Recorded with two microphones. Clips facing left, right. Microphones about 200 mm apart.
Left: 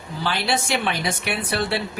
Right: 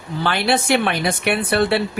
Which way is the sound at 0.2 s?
60° right (ahead or behind).